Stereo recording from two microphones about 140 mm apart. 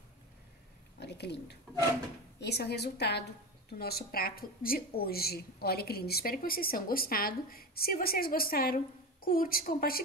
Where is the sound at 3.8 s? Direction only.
90° left.